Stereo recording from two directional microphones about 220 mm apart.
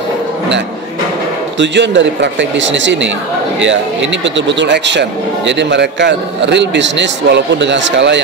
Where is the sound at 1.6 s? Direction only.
55° right (ahead or behind).